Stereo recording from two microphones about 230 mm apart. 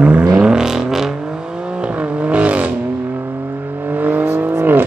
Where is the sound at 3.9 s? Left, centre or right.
Centre.